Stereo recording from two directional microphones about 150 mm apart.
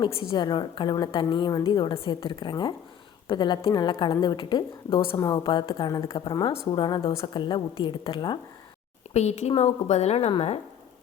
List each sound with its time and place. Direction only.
0.0 s a woman's voice: 35° left (ahead or behind)
9.1 s a woman's voice: 50° left (ahead or behind)